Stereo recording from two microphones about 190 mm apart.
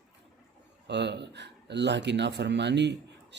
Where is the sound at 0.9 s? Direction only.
65° right (ahead or behind).